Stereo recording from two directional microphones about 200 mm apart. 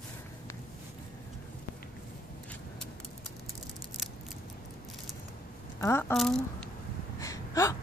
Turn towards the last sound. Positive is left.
turn(degrees=15)  # may be behind; listen again after turning